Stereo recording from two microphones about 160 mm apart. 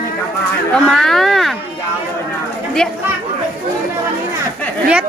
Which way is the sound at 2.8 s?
5° left (ahead or behind).